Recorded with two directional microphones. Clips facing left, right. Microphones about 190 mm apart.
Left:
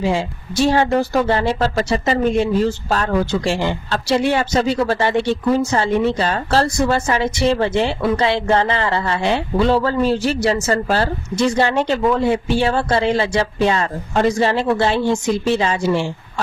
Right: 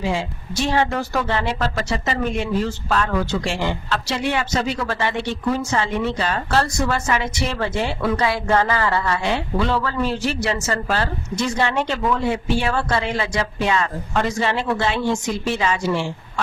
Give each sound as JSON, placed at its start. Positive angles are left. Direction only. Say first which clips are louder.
{"t": 0.6, "sound": "a woman's voice", "louder": "left 5 dB", "side_deg": 35}